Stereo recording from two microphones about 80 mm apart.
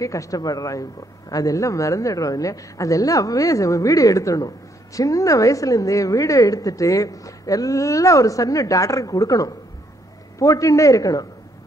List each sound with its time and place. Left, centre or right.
0.0 s a woman's voice: left